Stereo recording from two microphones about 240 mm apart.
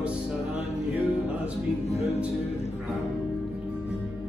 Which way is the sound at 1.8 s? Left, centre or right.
Left.